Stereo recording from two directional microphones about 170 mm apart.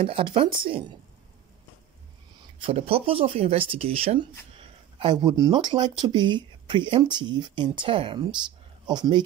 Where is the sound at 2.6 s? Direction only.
35° right (ahead or behind).